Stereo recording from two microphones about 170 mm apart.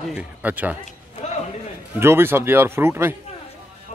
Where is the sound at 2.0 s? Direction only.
15° right (ahead or behind).